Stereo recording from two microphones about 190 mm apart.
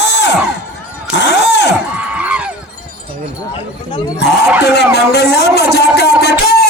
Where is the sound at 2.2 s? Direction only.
5° right (ahead or behind).